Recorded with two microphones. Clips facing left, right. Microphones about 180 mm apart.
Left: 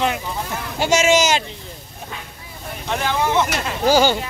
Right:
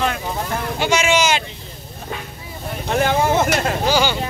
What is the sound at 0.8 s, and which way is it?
Speech, 40° left (ahead or behind).